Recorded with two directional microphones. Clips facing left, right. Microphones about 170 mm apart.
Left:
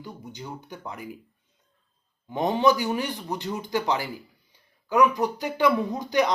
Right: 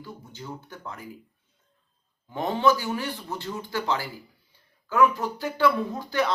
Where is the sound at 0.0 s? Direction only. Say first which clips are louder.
Left 2 dB; 15° left (ahead or behind).